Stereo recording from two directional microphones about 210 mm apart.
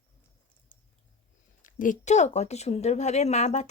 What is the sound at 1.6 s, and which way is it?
Speech, 40° left (ahead or behind).